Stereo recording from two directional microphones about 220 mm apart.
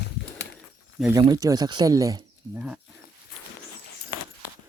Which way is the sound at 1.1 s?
15° right (ahead or behind).